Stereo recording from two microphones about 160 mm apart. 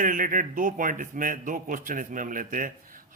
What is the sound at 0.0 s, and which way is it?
A man's voice, 60° right (ahead or behind).